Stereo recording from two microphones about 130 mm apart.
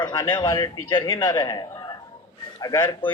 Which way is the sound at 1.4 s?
30° left (ahead or behind).